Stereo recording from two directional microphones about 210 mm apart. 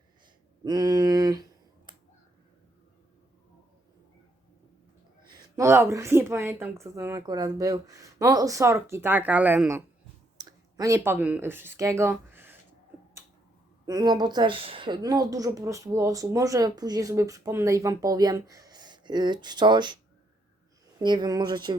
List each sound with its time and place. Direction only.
0.6 s a sound: 15° right (ahead or behind)
5.3 s speech: 15° right (ahead or behind)
13.8 s speech: 20° right (ahead or behind)
21.0 s speech: 20° right (ahead or behind)